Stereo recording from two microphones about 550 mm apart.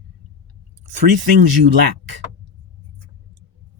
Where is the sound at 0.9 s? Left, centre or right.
Right.